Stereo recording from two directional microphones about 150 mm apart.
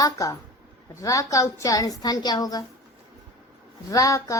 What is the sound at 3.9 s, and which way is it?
Speech, 20° left (ahead or behind).